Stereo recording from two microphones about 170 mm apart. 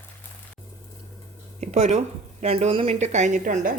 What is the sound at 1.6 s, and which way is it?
A woman's voice, 45° right (ahead or behind).